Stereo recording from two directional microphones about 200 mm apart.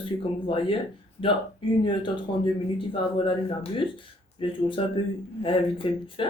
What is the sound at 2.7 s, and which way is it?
Speech, 25° left (ahead or behind).